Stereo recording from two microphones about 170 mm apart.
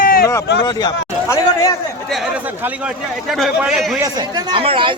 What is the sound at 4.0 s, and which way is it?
Speech, 25° right (ahead or behind).